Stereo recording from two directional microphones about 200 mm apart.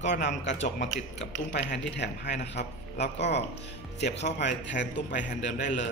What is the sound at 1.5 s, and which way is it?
A man's voice, 55° left (ahead or behind).